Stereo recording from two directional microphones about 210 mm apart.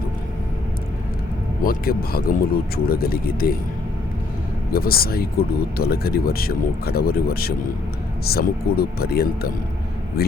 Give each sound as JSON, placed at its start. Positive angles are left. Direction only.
{"t": 1.6, "sound": "speech", "side_deg": 45}
{"t": 4.7, "sound": "speech", "side_deg": 45}